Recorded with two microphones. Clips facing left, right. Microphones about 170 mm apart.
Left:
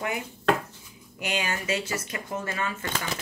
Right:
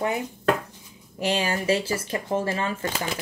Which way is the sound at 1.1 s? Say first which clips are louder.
Right 5 dB; 30° right (ahead or behind).